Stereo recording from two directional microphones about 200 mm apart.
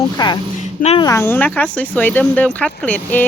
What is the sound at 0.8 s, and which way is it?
Speech, 30° left (ahead or behind).